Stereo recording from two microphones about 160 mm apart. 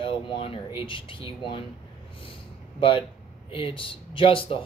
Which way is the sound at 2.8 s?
35° left (ahead or behind).